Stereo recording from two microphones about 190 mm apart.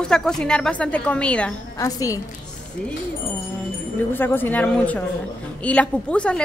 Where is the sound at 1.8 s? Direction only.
15° left (ahead or behind).